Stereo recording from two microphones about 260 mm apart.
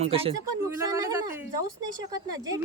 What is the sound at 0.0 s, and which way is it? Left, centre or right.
Speech, right.